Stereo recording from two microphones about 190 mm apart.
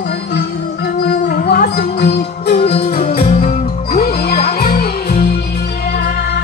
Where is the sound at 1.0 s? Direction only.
55° left (ahead or behind).